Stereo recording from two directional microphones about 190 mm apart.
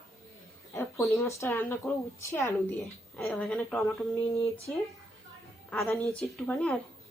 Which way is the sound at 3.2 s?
Centre (ahead or behind).